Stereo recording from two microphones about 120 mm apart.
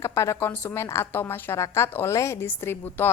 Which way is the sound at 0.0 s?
25° left (ahead or behind).